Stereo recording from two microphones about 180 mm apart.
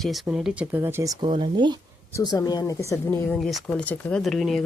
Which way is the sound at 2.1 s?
20° left (ahead or behind).